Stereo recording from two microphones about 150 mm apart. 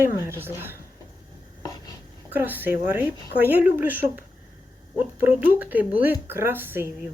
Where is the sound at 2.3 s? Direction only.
15° right (ahead or behind).